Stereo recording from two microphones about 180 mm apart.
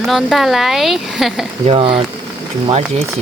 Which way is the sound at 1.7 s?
30° right (ahead or behind).